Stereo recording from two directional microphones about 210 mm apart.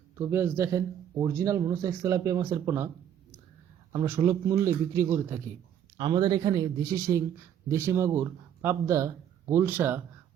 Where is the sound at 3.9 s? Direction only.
15° right (ahead or behind).